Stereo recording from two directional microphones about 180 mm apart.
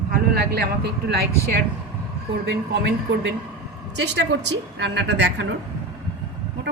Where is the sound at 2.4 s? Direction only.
75° right (ahead or behind).